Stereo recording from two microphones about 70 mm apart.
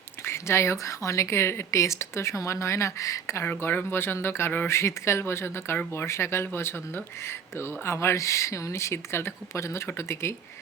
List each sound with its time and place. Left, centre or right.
0.3 s speech: left
3.4 s speech: left
4.7 s speech: left